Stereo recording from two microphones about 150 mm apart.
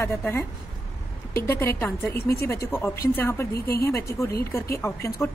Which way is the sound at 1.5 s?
15° left (ahead or behind).